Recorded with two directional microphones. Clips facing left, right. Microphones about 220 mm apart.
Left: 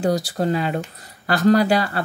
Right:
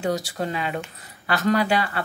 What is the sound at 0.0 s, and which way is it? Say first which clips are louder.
Speech: left 5 dB; 35° left (ahead or behind).